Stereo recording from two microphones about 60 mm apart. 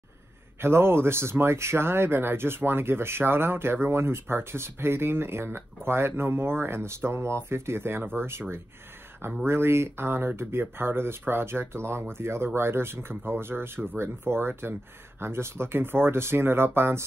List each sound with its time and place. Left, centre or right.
0.6 s speech: right